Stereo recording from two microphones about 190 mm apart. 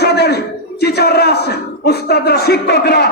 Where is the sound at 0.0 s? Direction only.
60° left (ahead or behind).